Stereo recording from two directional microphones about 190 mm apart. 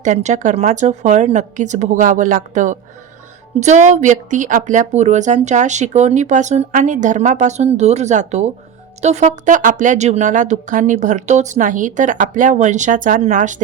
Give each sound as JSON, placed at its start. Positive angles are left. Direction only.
{"t": 0.0, "sound": "speech", "side_deg": -40}